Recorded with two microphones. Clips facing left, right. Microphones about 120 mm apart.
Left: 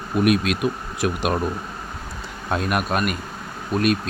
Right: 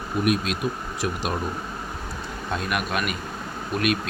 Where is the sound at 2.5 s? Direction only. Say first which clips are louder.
Left 5 dB; 45° left (ahead or behind).